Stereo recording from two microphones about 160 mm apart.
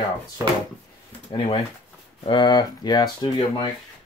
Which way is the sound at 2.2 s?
30° left (ahead or behind).